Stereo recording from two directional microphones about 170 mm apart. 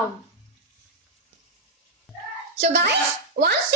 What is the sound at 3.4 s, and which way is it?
Speech, 60° right (ahead or behind).